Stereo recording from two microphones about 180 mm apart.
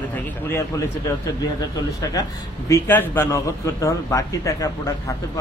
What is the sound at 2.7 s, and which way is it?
A man's voice, 10° left (ahead or behind).